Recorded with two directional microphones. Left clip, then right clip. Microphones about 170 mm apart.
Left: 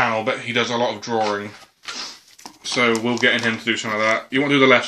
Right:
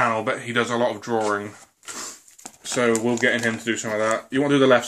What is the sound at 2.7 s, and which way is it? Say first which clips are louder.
Speech: left 2 dB; 45° left (ahead or behind).